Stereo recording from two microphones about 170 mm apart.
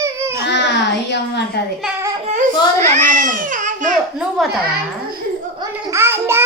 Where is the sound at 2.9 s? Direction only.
45° right (ahead or behind).